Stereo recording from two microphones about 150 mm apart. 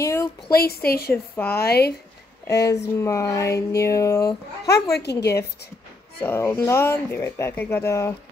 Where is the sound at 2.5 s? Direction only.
20° left (ahead or behind).